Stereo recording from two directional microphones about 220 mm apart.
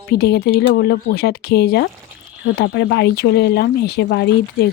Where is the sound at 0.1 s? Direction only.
50° left (ahead or behind).